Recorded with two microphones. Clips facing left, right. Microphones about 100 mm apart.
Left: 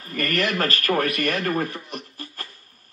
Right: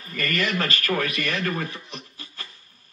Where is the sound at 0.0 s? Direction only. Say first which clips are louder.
Left 2 dB; 45° left (ahead or behind).